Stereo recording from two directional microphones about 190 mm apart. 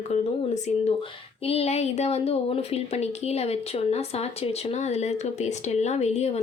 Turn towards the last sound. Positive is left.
turn(degrees=35)  # may be behind; listen again after turning